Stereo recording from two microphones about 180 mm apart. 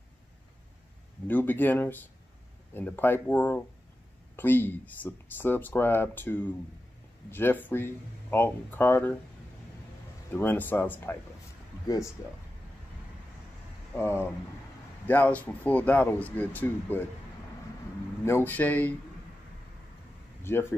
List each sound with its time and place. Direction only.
1.2 s speech: 10° left (ahead or behind)
10.3 s speech: 10° left (ahead or behind)
13.9 s speech: 10° left (ahead or behind)
18.2 s speech: 10° left (ahead or behind)
20.5 s speech: 15° left (ahead or behind)